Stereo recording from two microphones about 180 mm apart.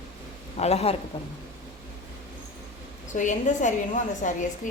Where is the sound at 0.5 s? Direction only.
35° left (ahead or behind).